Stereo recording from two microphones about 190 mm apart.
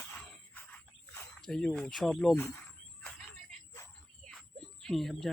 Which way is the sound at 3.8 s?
15° left (ahead or behind).